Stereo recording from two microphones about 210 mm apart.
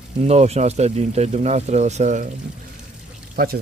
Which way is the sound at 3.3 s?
45° right (ahead or behind).